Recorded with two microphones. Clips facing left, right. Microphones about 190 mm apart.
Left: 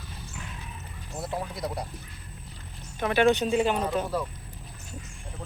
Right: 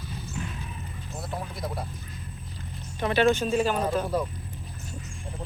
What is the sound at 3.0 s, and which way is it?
Speech, 10° left (ahead or behind).